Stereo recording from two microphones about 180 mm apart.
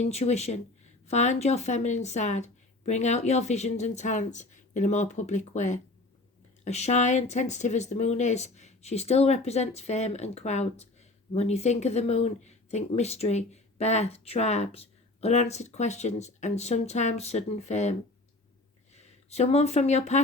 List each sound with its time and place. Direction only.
0.0 s speech: 35° left (ahead or behind)
18.9 s speech: 35° left (ahead or behind)